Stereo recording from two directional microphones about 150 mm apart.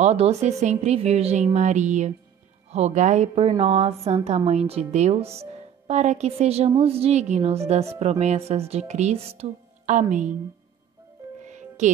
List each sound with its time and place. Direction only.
0.0 s speech: 45° right (ahead or behind)
11.4 s music: 50° right (ahead or behind)